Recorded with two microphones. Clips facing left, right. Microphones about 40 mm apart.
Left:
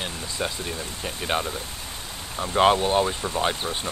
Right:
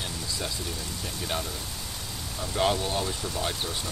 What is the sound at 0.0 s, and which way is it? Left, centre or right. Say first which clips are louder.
Speech: left 4 dB; left.